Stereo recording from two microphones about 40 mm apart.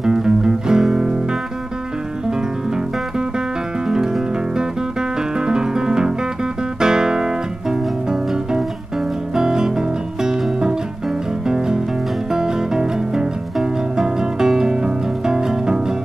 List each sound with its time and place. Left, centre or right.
0.0 s music: centre
3.8 s music: centre
5.4 s music: centre
6.8 s guitar: centre
8.1 s music: centre